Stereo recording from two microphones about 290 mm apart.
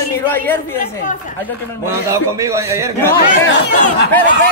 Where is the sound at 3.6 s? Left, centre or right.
Left.